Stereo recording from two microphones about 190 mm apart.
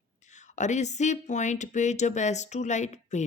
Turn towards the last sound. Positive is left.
turn(degrees=40)  # may be behind; listen again after turning